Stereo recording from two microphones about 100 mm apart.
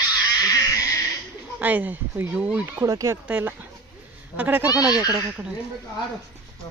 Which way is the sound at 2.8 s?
30° right (ahead or behind).